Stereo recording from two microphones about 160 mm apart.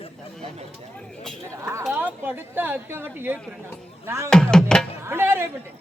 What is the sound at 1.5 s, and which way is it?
A woman's voice, 15° right (ahead or behind).